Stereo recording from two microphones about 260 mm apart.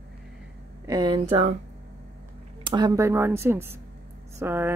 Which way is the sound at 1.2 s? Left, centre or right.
Right.